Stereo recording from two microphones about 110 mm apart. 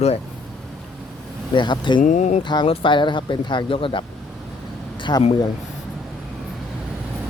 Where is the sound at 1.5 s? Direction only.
45° left (ahead or behind).